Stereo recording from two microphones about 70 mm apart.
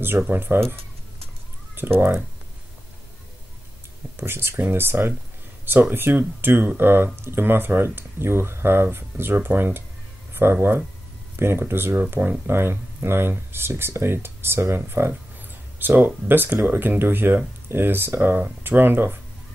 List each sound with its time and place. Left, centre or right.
0.3 s speech: right
1.8 s speech: right
4.2 s speech: right